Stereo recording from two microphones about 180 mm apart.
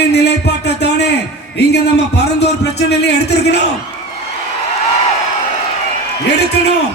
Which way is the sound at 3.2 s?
65° left (ahead or behind).